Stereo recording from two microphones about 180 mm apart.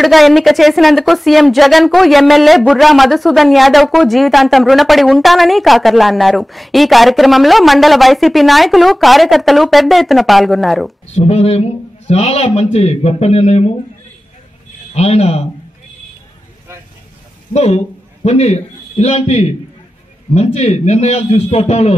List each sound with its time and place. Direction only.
0.0 s speech: centre (ahead or behind)
11.1 s speech: 35° left (ahead or behind)
15.0 s speech: 35° left (ahead or behind)
17.6 s a man's voice: 35° left (ahead or behind)